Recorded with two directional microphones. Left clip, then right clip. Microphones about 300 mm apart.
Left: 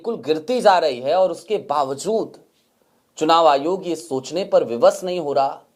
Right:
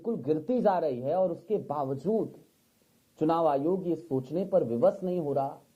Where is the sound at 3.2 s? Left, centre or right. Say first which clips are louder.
Left 11 dB; centre.